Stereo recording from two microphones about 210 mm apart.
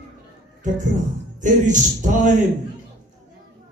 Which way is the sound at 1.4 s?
35° right (ahead or behind).